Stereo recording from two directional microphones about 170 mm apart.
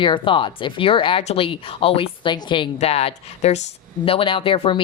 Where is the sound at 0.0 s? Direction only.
30° left (ahead or behind).